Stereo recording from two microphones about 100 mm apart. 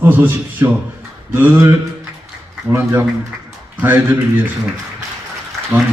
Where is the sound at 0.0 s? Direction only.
20° right (ahead or behind).